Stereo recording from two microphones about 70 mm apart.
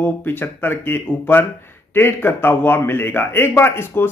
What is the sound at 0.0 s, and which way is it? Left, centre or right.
Speech, left.